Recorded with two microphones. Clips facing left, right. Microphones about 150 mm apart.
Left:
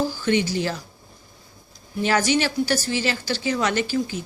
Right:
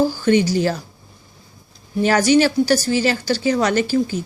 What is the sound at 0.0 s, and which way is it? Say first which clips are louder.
Speech: right 6 dB; 45° right (ahead or behind).